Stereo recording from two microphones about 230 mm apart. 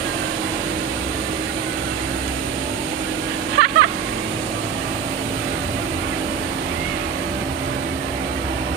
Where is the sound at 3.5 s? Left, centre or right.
Right.